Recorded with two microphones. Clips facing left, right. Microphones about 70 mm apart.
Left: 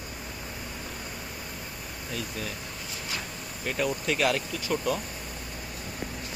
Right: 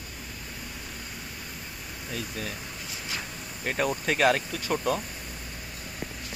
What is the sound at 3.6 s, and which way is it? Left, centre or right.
Speech, right.